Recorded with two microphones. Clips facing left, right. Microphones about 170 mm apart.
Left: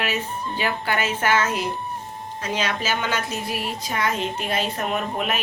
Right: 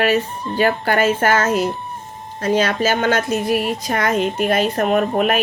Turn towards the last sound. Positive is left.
turn(degrees=-55)  # may be behind; listen again after turning